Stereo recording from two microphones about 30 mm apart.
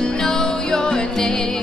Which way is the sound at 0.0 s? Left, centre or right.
Centre.